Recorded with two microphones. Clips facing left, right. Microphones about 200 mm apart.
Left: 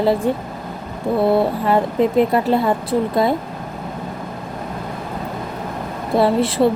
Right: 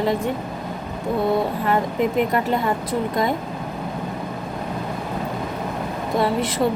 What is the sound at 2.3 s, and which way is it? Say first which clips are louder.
Speech: left 4 dB; 30° left (ahead or behind).